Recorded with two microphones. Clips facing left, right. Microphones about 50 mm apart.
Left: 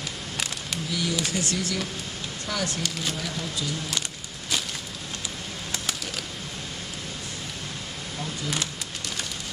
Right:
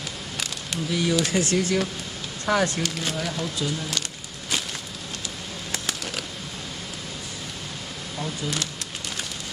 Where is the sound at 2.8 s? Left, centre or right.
Centre.